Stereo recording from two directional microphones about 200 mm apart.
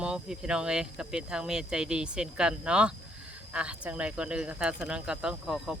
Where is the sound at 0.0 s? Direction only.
5° right (ahead or behind).